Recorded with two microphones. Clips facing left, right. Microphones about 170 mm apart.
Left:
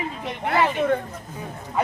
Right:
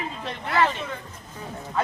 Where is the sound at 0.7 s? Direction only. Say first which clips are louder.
Left 12 dB; 55° left (ahead or behind).